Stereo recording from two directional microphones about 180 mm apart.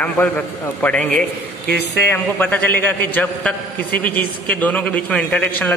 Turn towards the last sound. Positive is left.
turn(degrees=5)  # may be behind; listen again after turning